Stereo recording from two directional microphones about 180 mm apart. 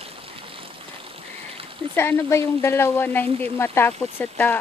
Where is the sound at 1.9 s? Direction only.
10° left (ahead or behind).